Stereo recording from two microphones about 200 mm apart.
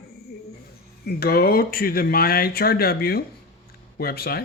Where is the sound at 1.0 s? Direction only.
50° left (ahead or behind).